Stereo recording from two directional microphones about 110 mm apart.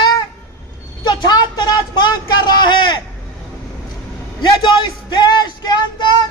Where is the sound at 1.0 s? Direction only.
40° left (ahead or behind).